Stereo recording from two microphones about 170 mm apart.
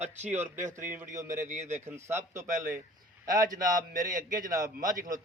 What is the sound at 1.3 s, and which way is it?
Speech, 45° right (ahead or behind).